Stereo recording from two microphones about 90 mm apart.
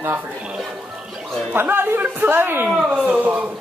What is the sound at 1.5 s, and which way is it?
A man's voice, 25° right (ahead or behind).